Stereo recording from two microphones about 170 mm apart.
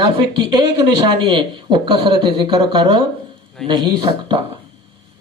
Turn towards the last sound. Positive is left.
turn(degrees=-25)  # may be behind; listen again after turning